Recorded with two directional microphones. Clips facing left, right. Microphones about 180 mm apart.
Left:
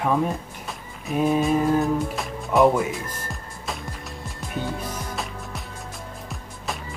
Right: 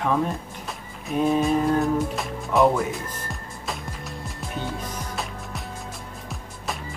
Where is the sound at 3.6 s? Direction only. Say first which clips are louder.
Even; centre (ahead or behind).